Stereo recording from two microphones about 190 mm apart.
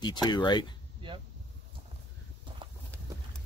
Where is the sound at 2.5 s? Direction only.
25° right (ahead or behind).